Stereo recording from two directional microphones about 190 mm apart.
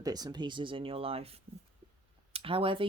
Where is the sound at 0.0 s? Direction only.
20° right (ahead or behind).